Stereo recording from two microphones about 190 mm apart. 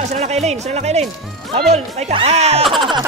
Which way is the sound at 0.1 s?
35° right (ahead or behind).